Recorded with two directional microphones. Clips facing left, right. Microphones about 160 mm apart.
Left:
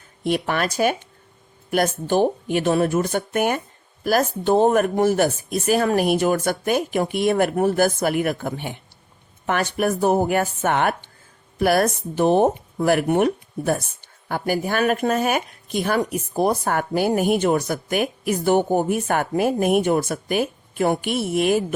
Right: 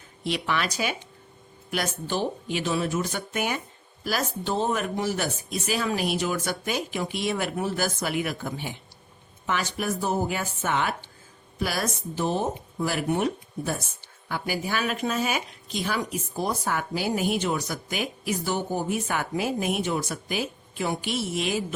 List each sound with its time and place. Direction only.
0.3 s speech: 50° left (ahead or behind)